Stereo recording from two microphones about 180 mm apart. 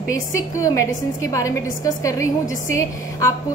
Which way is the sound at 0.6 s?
15° left (ahead or behind).